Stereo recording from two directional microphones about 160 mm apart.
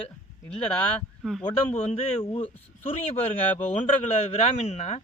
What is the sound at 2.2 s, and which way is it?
Speech, 30° left (ahead or behind).